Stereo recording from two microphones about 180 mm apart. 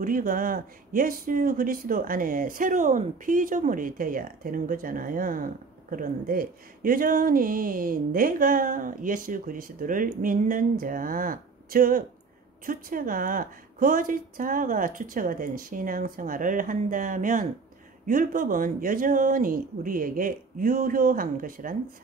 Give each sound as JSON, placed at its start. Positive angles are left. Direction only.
{"t": 0.0, "sound": "speech", "side_deg": -50}